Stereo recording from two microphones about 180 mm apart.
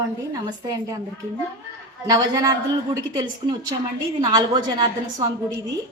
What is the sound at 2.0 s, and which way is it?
Speech, 20° right (ahead or behind).